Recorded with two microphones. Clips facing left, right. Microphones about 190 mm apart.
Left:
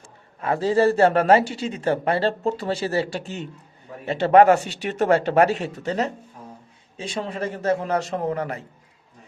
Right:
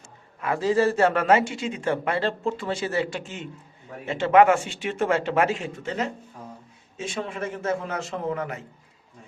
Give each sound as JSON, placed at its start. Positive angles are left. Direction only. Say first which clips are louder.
{"t": 0.3, "sound": "speech", "louder": "left 2 dB", "side_deg": 30}